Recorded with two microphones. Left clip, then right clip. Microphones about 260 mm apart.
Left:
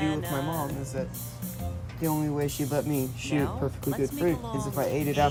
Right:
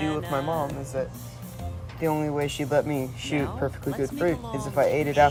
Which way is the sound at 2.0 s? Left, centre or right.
Right.